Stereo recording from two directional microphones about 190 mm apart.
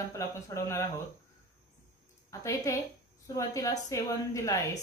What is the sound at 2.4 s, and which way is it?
Speech, 15° left (ahead or behind).